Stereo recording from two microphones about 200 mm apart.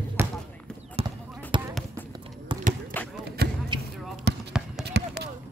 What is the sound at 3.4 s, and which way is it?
Basketball bounce, 50° right (ahead or behind).